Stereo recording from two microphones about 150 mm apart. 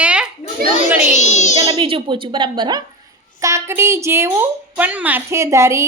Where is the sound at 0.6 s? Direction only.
90° right.